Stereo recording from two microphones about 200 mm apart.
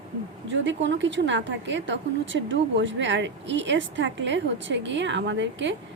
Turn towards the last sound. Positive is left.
turn(degrees=-65)  # may be behind; listen again after turning